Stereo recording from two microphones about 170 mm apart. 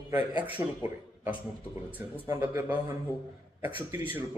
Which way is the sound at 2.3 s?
20° right (ahead or behind).